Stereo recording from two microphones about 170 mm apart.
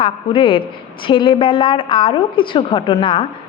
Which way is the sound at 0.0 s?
30° left (ahead or behind).